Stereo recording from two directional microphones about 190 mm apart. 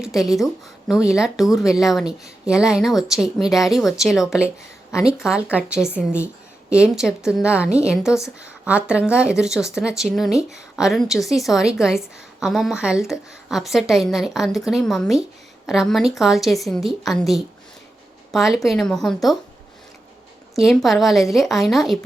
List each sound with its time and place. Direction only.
0.0 s speech: centre (ahead or behind)
20.6 s speech: centre (ahead or behind)